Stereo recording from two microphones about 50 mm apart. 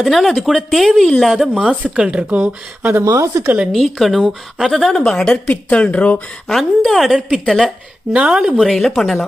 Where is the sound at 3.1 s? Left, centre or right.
Right.